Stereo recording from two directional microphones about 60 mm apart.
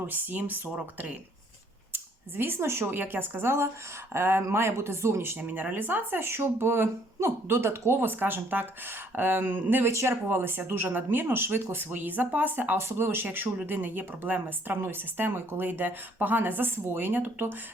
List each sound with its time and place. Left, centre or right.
0.0 s speech: right
5.4 s speech: right
9.9 s speech: right